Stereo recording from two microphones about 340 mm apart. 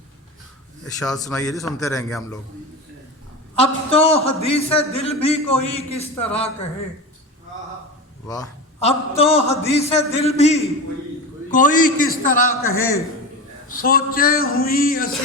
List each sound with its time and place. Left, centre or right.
0.9 s a man's voice: centre
3.5 s a man's voice: centre
8.3 s a man's voice: centre
12.6 s a man's voice: centre
13.7 s speech: left